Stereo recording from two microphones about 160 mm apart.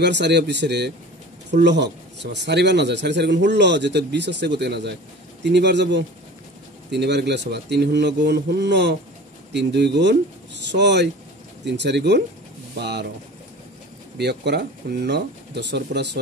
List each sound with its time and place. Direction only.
0.0 s speech: 90° right
14.1 s speech: 90° right